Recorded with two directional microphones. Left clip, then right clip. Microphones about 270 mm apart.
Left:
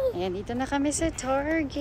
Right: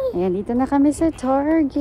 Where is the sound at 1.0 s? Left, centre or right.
Right.